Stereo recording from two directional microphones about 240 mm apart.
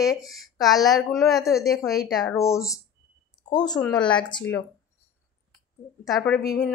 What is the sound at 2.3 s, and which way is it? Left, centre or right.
Speech, centre.